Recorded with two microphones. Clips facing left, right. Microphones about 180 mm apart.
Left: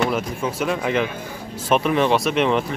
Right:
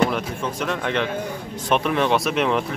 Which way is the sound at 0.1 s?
5° left (ahead or behind).